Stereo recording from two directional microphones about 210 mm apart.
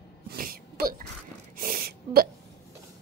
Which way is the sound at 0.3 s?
45° right (ahead or behind).